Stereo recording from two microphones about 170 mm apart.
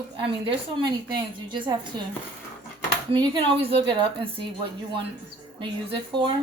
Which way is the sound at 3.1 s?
30° right (ahead or behind).